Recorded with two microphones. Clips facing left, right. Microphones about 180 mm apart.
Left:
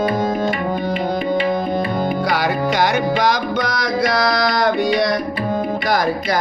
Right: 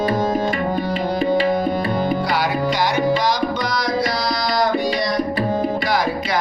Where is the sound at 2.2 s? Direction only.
50° left (ahead or behind).